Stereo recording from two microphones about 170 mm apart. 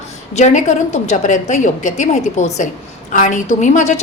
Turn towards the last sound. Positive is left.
turn(degrees=45)  # may be behind; listen again after turning